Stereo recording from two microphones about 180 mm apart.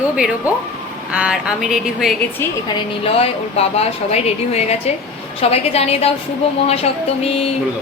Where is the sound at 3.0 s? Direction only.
35° left (ahead or behind).